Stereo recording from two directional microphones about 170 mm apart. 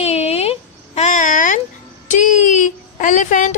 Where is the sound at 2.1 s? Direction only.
50° left (ahead or behind).